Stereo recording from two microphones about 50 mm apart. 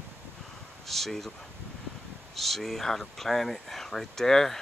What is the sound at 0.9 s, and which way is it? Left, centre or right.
Speech, centre.